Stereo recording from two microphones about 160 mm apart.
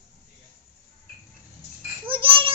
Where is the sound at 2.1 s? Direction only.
30° right (ahead or behind).